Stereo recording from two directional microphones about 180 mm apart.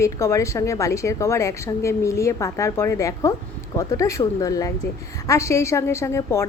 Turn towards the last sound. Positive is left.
turn(degrees=15)  # may be behind; listen again after turning